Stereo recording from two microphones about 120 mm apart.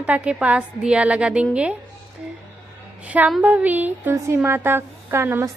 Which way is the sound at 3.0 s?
15° right (ahead or behind).